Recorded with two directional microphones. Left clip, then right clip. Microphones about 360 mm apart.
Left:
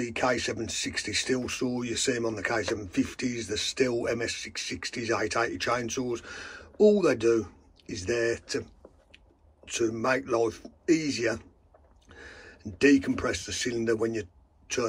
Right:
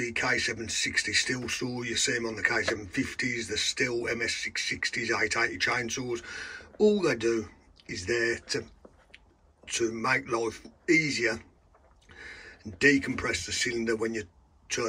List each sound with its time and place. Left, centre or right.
0.0 s speech: centre
9.8 s speech: centre